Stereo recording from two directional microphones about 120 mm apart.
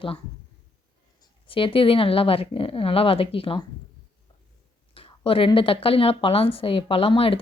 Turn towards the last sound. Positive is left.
turn(degrees=50)  # may be behind; listen again after turning